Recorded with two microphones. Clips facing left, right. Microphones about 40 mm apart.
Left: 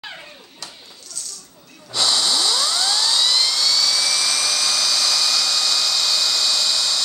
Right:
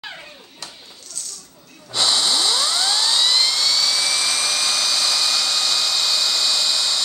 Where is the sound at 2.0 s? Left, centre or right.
Centre.